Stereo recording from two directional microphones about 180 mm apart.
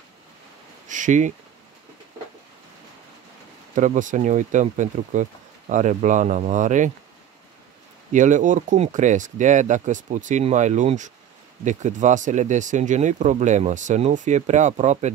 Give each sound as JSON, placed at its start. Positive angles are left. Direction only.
{"t": 0.8, "sound": "a sound", "side_deg": -45}
{"t": 3.7, "sound": "speech", "side_deg": -45}
{"t": 8.1, "sound": "speech", "side_deg": -45}